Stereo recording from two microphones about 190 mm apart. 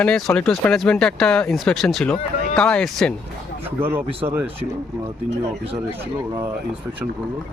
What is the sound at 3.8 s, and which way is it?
Speech, 10° right (ahead or behind).